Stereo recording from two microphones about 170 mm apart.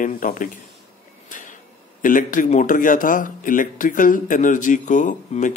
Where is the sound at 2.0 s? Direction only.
50° left (ahead or behind).